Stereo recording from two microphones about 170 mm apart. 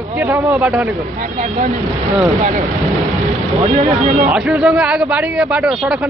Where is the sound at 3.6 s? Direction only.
35° right (ahead or behind).